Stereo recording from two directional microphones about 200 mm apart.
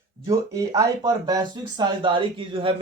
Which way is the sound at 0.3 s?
15° right (ahead or behind).